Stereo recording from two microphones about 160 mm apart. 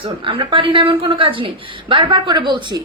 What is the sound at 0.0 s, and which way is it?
Speech, 35° right (ahead or behind).